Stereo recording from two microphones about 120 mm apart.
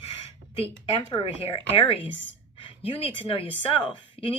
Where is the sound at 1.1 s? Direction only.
45° left (ahead or behind).